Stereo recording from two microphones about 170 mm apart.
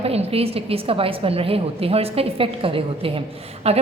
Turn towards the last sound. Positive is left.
turn(degrees=-35)  # may be behind; listen again after turning